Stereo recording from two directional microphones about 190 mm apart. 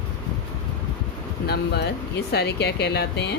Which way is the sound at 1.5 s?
60° left (ahead or behind).